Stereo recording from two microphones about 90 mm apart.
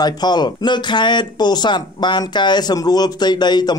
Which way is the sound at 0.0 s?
50° left (ahead or behind).